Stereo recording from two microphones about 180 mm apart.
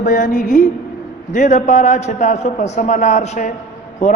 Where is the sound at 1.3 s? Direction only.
45° left (ahead or behind).